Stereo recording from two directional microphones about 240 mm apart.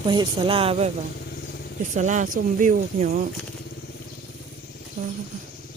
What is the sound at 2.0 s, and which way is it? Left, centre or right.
Speech, right.